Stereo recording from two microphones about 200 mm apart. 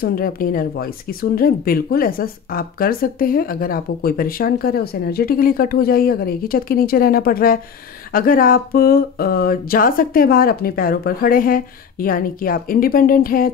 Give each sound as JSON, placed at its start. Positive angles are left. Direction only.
{"t": 0.0, "sound": "speech", "side_deg": 45}